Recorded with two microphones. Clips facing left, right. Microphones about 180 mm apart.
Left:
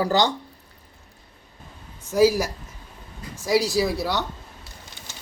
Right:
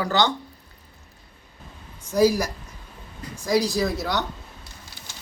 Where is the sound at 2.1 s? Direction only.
10° left (ahead or behind).